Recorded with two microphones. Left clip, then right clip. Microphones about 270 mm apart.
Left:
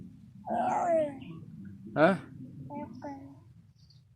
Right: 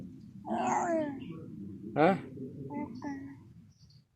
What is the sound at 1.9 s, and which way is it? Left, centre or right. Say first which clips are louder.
Speech: left 2 dB; centre.